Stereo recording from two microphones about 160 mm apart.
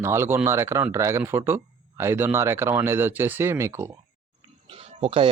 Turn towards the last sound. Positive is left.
turn(degrees=-35)  # may be behind; listen again after turning